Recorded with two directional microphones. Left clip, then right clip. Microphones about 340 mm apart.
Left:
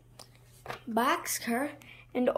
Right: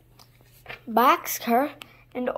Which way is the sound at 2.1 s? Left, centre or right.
Centre.